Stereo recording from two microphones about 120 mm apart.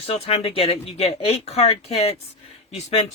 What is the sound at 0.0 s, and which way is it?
Speech, 60° left (ahead or behind).